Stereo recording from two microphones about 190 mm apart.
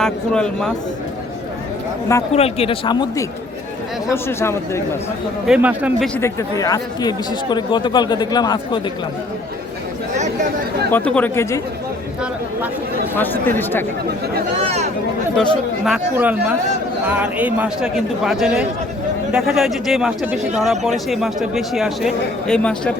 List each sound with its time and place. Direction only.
0.0 s speech: 5° left (ahead or behind)
2.3 s speech: 30° left (ahead or behind)
4.1 s speech: 15° left (ahead or behind)
5.5 s speech: 5° right (ahead or behind)
6.1 s speech: 15° left (ahead or behind)
10.9 s speech: 10° left (ahead or behind)
13.1 s speech: 10° left (ahead or behind)
14.6 s speech: 30° right (ahead or behind)
15.4 s speech: centre (ahead or behind)